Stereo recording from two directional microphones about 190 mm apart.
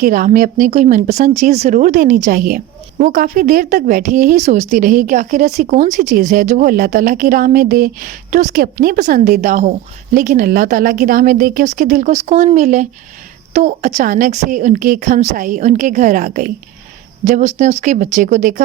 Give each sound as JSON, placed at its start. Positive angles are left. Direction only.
{"t": 0.0, "sound": "a woman's voice", "side_deg": -45}